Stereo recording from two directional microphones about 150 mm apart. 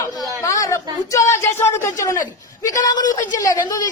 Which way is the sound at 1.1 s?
20° left (ahead or behind).